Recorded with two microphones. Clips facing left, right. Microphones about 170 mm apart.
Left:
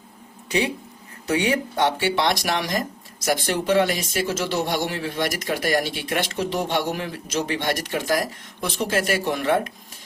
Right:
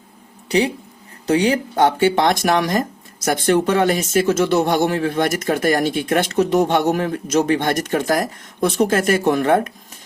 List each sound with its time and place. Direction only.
0.4 s speech: 35° right (ahead or behind)